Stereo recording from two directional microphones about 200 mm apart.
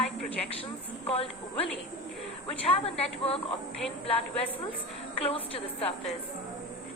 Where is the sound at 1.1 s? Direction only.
30° left (ahead or behind).